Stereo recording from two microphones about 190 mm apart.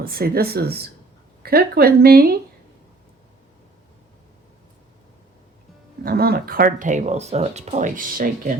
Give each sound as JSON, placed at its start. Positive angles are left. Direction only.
{"t": 0.0, "sound": "a woman's voice", "side_deg": -55}
{"t": 6.1, "sound": "speech", "side_deg": -55}